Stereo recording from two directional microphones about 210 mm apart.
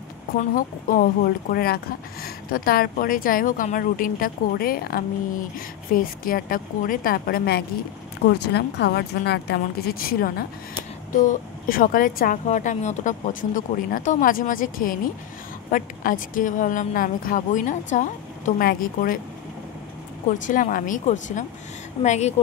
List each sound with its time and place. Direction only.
0.3 s a woman's voice: 40° left (ahead or behind)
20.2 s speech: 40° left (ahead or behind)